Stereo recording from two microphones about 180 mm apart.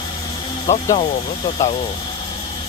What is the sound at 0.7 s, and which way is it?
Speech, 15° left (ahead or behind).